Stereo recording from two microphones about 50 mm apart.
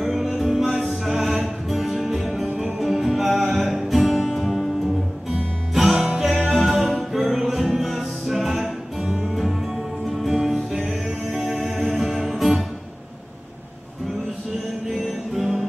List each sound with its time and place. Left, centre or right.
0.0 s music: centre
2.4 s music: centre
2.8 s music: centre
5.8 s music: centre
14.9 s music: centre